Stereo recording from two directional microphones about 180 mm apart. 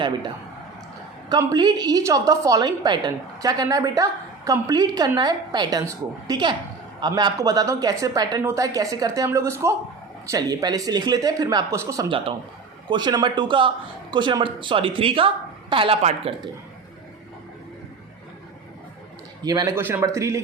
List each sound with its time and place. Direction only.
1.3 s a woman's voice: 20° right (ahead or behind)
19.4 s a man's voice: 20° right (ahead or behind)